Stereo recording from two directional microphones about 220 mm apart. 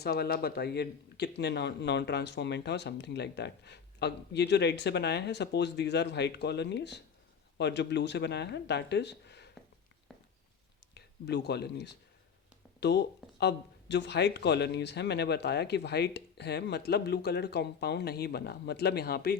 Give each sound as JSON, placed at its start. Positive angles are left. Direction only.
{"t": 0.0, "sound": "speech", "side_deg": 45}
{"t": 10.1, "sound": "a sound", "side_deg": 0}
{"t": 10.9, "sound": "speech", "side_deg": 50}